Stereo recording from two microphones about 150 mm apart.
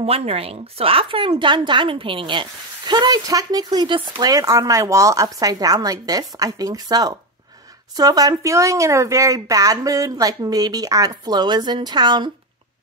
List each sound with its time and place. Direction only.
0.0 s speech: 40° right (ahead or behind)